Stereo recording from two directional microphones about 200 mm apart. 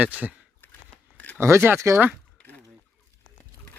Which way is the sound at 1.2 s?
5° left (ahead or behind).